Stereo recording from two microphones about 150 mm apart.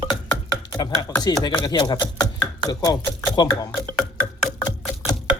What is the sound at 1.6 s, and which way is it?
Speech, 30° left (ahead or behind).